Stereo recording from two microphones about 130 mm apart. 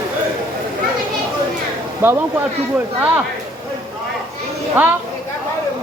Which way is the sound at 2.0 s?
15° right (ahead or behind).